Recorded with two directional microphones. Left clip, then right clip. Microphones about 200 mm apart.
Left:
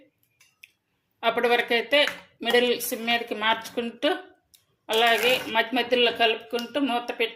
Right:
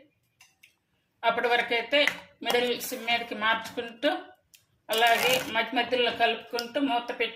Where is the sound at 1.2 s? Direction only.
45° left (ahead or behind).